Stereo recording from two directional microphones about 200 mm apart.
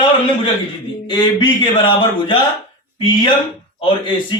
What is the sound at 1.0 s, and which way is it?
Speech, 20° left (ahead or behind).